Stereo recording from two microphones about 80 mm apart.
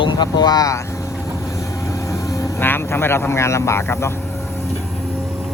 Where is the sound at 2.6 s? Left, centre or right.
Left.